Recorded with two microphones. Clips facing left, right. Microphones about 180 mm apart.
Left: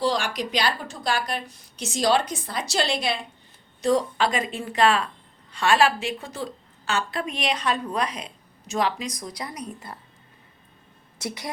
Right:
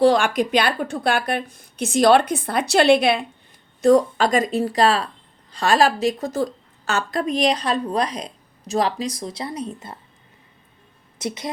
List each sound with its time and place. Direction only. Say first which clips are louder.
0.0 s a woman's voice: right 9 dB; 55° right (ahead or behind)
3.8 s a woman's voice: right 7 dB; 50° right (ahead or behind); by 10.0 s 25° right (ahead or behind)
11.2 s a woman's voice: right 5 dB; 20° right (ahead or behind)